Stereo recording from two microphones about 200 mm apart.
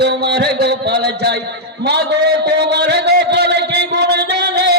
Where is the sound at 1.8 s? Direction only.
55° right (ahead or behind).